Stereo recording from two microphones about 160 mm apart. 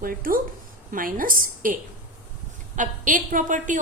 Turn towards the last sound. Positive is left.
turn(degrees=-55)  # may be behind; listen again after turning